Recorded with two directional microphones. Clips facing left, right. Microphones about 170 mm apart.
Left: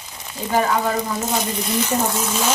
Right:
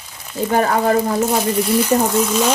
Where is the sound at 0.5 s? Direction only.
50° right (ahead or behind).